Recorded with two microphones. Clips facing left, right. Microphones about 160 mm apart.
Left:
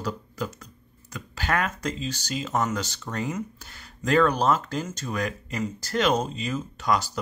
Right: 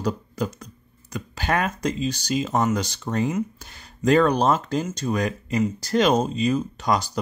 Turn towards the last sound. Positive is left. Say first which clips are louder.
# right 2 dB
turn(degrees=-20)  # may be behind; listen again after turning